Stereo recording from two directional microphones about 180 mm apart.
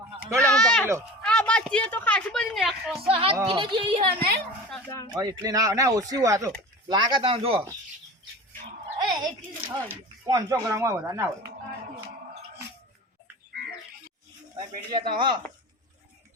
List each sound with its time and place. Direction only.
0.3 s a sound: 5° left (ahead or behind)
1.2 s a woman's voice: 5° left (ahead or behind)
3.1 s speech: 30° right (ahead or behind)
5.1 s speech: 20° right (ahead or behind)
9.0 s speech: 25° right (ahead or behind)
14.8 s speech: 25° right (ahead or behind)